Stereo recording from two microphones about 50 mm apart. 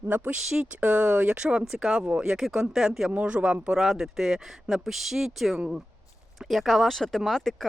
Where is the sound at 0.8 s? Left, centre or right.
Right.